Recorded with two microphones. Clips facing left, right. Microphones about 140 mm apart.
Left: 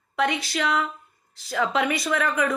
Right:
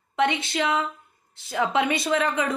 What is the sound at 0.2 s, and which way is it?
A woman's voice, 25° right (ahead or behind).